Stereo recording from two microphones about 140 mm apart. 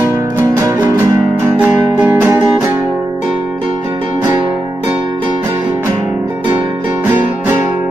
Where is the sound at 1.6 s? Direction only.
10° right (ahead or behind).